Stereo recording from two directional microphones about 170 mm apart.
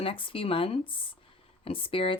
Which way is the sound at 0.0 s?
30° left (ahead or behind).